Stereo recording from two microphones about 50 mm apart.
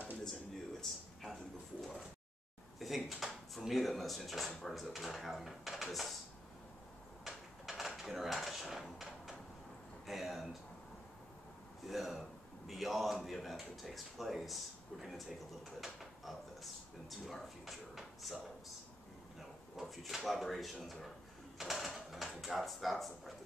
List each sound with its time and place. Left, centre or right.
0.2 s a sound: centre
2.8 s speech: centre
7.2 s drawer open or close: centre
10.0 s a sound: centre
11.9 s a man's voice: centre
15.8 s a sound: centre
17.1 s speech: centre
19.8 s speech: centre
21.5 s mechanisms: centre
22.4 s speech: centre